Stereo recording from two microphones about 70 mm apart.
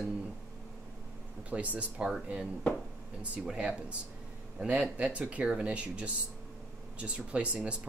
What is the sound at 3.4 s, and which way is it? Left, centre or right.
Speech, centre.